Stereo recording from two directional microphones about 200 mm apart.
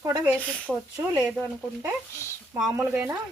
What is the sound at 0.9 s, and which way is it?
Speech, 15° right (ahead or behind).